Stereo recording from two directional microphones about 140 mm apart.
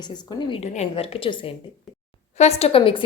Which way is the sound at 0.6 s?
45° left (ahead or behind).